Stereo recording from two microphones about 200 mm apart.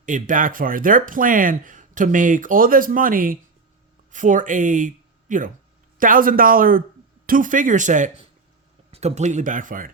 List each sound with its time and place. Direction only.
0.0 s speech: 40° right (ahead or behind)